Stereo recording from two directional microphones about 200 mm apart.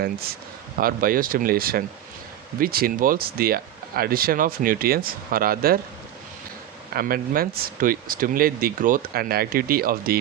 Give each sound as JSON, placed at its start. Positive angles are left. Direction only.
{"t": 0.8, "sound": "speech", "side_deg": -45}
{"t": 6.9, "sound": "speech", "side_deg": -45}